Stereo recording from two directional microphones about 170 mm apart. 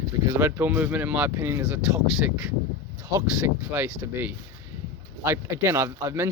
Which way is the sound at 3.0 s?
15° right (ahead or behind).